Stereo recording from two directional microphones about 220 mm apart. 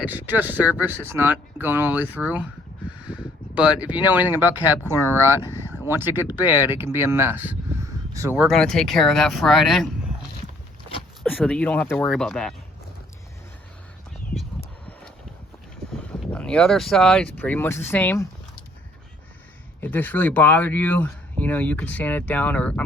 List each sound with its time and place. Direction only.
0.0 s speech: 10° right (ahead or behind)
11.2 s speech: 5° left (ahead or behind)
16.0 s speech: 5° left (ahead or behind)
19.8 s speech: 10° left (ahead or behind)